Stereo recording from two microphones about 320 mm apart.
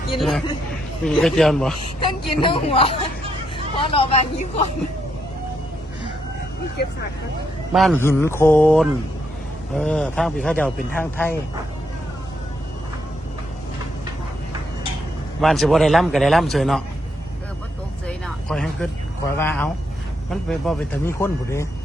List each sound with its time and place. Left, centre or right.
0.2 s a man's voice: centre
2.0 s speech: centre
7.7 s a man's voice: centre
15.4 s a man's voice: centre
18.4 s a man's voice: centre